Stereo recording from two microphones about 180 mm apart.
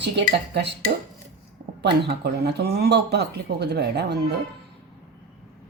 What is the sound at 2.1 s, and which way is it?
Speech, 65° right (ahead or behind).